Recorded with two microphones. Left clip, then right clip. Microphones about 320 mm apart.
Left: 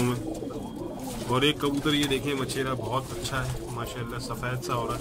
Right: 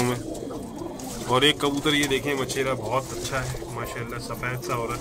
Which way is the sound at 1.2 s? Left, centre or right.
Centre.